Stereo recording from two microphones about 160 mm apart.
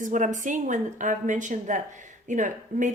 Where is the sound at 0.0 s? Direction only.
50° right (ahead or behind).